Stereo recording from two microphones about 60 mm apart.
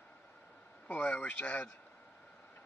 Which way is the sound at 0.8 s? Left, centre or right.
Left.